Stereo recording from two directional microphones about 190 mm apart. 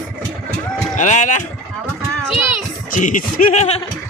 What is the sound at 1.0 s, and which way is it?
Sheep, 40° left (ahead or behind).